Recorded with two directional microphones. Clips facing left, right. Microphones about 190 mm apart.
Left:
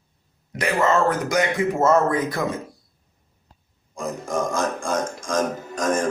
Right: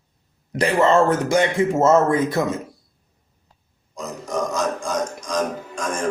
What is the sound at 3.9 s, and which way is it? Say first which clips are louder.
Speech: left 1 dB; 50° left (ahead or behind).